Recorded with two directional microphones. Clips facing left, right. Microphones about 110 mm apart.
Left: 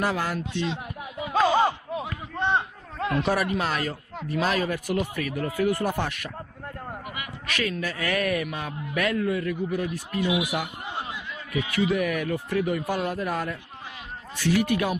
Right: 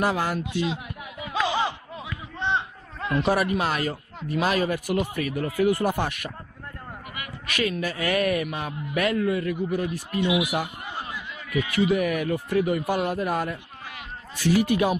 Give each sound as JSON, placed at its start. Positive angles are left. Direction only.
{"t": 0.0, "sound": "a man's voice", "side_deg": -15}
{"t": 1.3, "sound": "a sound", "side_deg": 40}
{"t": 3.5, "sound": "a man's voice", "side_deg": -10}
{"t": 7.4, "sound": "a man's voice", "side_deg": -10}
{"t": 10.9, "sound": "a sound", "side_deg": 20}
{"t": 11.7, "sound": "a man's voice", "side_deg": -10}